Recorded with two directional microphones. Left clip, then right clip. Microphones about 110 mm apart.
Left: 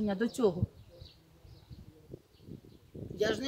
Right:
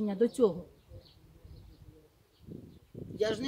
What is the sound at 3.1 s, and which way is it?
Speech, 25° left (ahead or behind).